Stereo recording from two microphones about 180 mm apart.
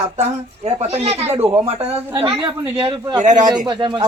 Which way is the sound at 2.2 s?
25° right (ahead or behind).